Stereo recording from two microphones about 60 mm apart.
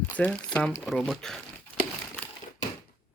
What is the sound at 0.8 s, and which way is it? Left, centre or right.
Speech, centre.